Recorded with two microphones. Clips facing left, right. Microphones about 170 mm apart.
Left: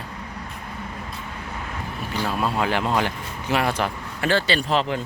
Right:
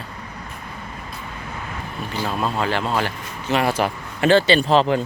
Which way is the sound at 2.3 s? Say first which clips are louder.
Right 1 dB; 10° left (ahead or behind).